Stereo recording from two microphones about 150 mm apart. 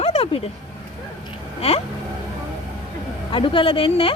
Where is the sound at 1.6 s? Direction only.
40° left (ahead or behind).